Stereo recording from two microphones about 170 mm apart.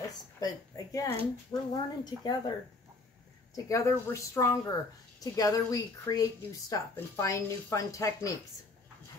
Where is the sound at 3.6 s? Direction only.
20° left (ahead or behind).